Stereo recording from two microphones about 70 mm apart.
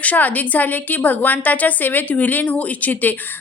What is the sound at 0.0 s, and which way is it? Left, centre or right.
A woman's voice, left.